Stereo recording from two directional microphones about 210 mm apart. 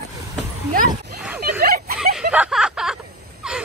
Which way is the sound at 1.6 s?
45° right (ahead or behind).